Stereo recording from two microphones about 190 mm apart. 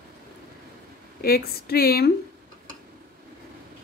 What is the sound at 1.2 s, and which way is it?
Speech, 55° left (ahead or behind).